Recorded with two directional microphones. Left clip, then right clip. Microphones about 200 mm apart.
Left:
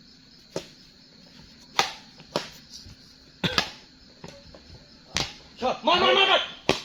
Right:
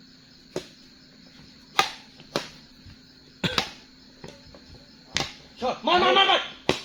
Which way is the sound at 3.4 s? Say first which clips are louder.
Even; centre (ahead or behind).